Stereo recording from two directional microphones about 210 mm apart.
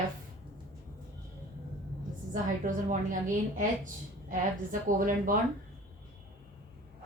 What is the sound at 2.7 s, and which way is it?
Speech, 40° right (ahead or behind).